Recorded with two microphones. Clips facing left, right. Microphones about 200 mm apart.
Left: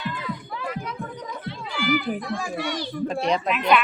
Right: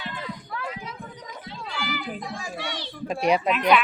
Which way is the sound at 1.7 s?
55° left (ahead or behind).